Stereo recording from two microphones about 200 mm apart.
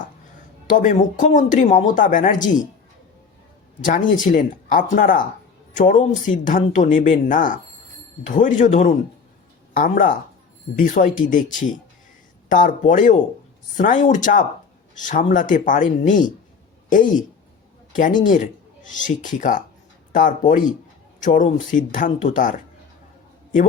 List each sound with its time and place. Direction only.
0.7 s speech: 40° left (ahead or behind)
4.1 s speech: 40° left (ahead or behind)
18.3 s speech: 40° left (ahead or behind)